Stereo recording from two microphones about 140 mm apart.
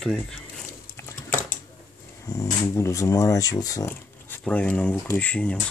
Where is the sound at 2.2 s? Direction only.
20° left (ahead or behind).